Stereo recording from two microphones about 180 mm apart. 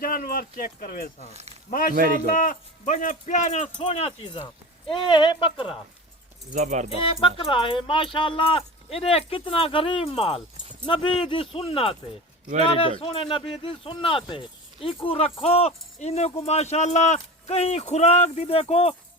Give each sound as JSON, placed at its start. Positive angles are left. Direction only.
{"t": 0.0, "sound": "speech", "side_deg": 50}
{"t": 1.3, "sound": "speech", "side_deg": -35}
{"t": 1.7, "sound": "speech", "side_deg": 50}
{"t": 6.5, "sound": "speech", "side_deg": -40}
{"t": 6.9, "sound": "speech", "side_deg": 30}